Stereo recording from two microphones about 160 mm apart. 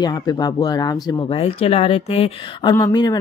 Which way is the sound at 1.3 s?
35° left (ahead or behind).